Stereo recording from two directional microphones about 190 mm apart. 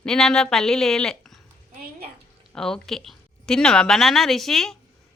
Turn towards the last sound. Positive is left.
turn(degrees=0)  # may be behind; listen again after turning